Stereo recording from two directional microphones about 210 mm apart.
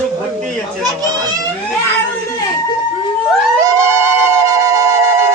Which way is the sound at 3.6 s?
15° right (ahead or behind).